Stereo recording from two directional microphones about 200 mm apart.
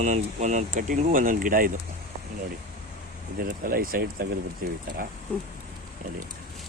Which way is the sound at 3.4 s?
45° right (ahead or behind).